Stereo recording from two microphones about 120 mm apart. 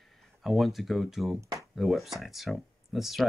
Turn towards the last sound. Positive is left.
turn(degrees=0)  # may be behind; listen again after turning